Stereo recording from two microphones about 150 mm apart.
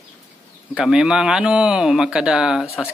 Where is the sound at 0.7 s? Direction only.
5° right (ahead or behind).